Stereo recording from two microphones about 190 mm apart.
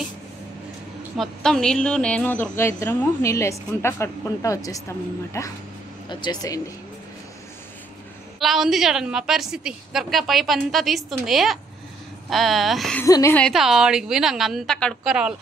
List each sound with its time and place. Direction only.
1.1 s speech: centre (ahead or behind); by 6.6 s 20° left (ahead or behind)
8.4 s a woman's voice: centre (ahead or behind)
13.0 s speech: 15° left (ahead or behind)
13.4 s a woman's voice: centre (ahead or behind)